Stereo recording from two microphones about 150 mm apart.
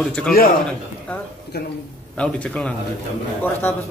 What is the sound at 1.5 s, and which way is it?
Speech, 90° left.